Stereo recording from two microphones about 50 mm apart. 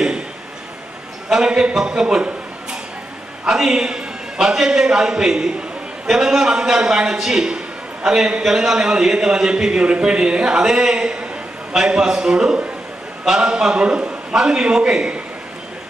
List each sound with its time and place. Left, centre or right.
1.3 s a man's voice: centre